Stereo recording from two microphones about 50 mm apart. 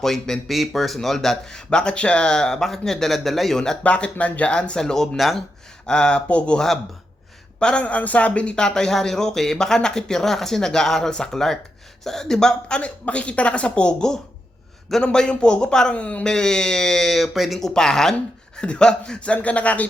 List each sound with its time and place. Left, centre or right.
0.0 s speech: centre
3.8 s speech: left
5.1 s speech: centre
5.8 s speech: centre
7.6 s speech: left; by 17.6 s centre
17.6 s speech: centre; by 19.9 s left